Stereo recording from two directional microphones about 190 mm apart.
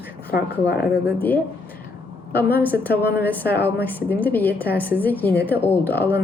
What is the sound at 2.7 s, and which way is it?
Speech, 60° left (ahead or behind).